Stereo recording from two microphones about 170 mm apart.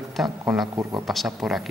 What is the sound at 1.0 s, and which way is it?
Speech, centre (ahead or behind).